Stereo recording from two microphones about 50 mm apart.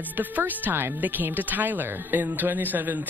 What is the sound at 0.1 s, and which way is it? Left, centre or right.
Speech, right.